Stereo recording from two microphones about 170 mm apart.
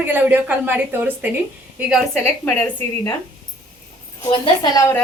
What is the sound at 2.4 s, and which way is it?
Speech, 10° left (ahead or behind).